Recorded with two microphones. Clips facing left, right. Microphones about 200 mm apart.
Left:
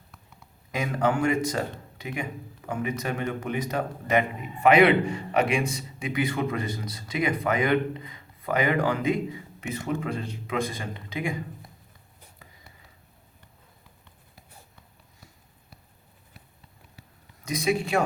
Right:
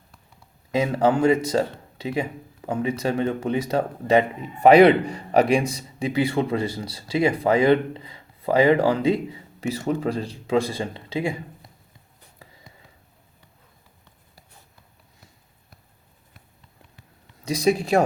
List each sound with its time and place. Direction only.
0.7 s speech: 30° right (ahead or behind)
17.4 s speech: 35° right (ahead or behind)